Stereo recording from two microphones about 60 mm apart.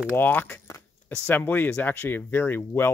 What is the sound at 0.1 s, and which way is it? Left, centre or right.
Speech, left.